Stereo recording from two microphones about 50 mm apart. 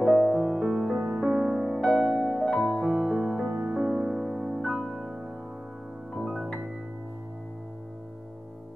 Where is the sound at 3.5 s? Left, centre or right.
Right.